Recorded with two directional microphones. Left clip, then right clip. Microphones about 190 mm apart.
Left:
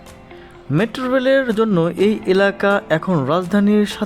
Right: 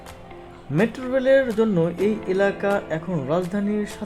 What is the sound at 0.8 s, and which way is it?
Speech, 20° left (ahead or behind).